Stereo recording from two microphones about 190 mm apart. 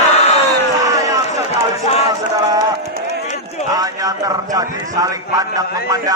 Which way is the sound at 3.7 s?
20° right (ahead or behind).